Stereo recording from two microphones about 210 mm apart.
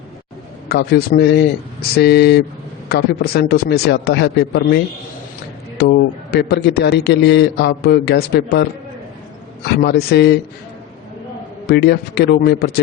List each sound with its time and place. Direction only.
0.7 s a man's voice: 50° left (ahead or behind)
9.6 s a man's voice: 50° left (ahead or behind)
11.6 s a man's voice: 50° left (ahead or behind)